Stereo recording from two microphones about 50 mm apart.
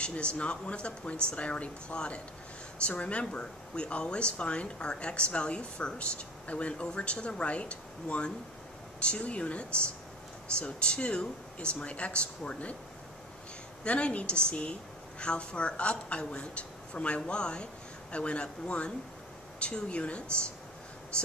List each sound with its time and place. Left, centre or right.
0.0 s speech: left
13.8 s speech: left